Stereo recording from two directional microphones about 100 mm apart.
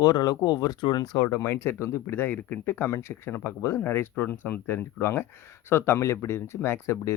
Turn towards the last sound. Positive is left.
turn(degrees=25)  # may be behind; listen again after turning